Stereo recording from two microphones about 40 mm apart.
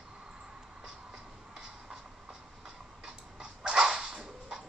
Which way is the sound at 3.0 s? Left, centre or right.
Centre.